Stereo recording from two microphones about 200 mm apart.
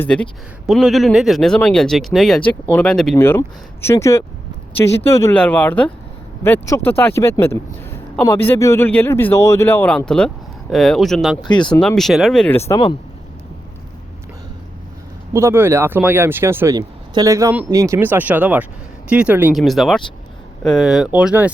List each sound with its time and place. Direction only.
0.0 s a man's voice: 5° left (ahead or behind)
11.4 s speech: 20° left (ahead or behind)
11.7 s speech: 5° left (ahead or behind)
15.3 s speech: 15° right (ahead or behind)